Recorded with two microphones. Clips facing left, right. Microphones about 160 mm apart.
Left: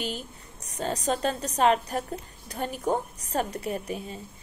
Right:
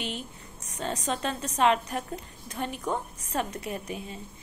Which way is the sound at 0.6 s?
35° left (ahead or behind).